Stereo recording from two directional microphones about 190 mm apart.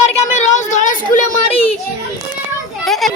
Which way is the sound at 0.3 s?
40° left (ahead or behind).